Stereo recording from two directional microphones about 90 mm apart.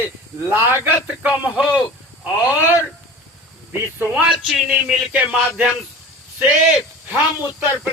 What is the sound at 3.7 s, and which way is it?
Male singing, 20° right (ahead or behind).